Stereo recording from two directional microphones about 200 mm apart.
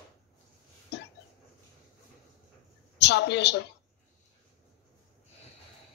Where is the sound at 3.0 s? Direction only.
60° left (ahead or behind).